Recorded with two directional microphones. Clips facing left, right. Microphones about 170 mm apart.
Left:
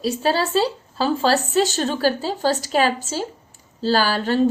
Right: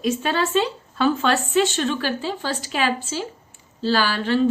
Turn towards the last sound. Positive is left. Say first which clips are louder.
# left 1 dB
turn(degrees=40)  # may be behind; listen again after turning